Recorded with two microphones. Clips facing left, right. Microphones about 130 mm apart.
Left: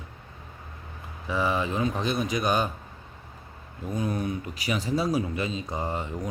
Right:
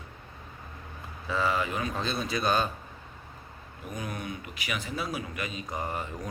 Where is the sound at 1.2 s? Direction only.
15° left (ahead or behind).